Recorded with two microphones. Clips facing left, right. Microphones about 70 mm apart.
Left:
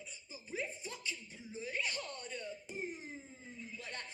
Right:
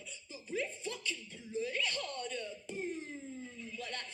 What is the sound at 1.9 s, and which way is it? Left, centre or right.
Speech, right.